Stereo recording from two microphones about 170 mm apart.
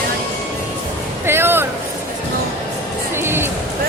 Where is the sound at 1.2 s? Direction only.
15° right (ahead or behind).